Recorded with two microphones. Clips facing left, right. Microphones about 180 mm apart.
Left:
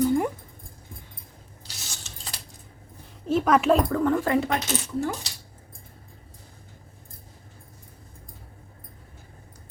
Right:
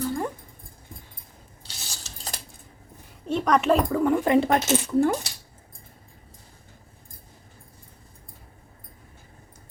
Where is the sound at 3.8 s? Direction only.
15° right (ahead or behind).